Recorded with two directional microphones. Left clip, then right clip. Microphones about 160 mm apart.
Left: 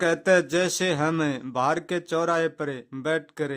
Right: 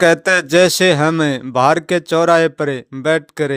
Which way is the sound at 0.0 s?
35° right (ahead or behind).